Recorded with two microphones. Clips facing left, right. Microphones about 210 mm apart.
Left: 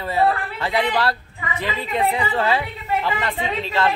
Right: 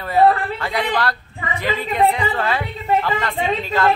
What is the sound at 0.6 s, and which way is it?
Speech, 25° left (ahead or behind).